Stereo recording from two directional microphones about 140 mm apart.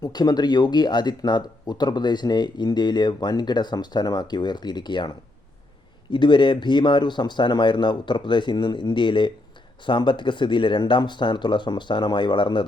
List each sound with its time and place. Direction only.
0.0 s speech: 30° left (ahead or behind)